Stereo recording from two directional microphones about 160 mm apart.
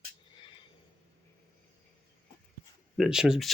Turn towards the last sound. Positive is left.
turn(degrees=0)  # may be behind; listen again after turning